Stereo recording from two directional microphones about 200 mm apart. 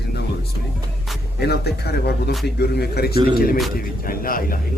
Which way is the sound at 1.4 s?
55° left (ahead or behind).